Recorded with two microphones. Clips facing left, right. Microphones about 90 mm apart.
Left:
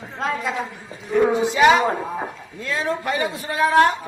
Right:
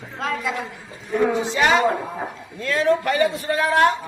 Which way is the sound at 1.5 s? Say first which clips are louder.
Left 3 dB; 10° left (ahead or behind).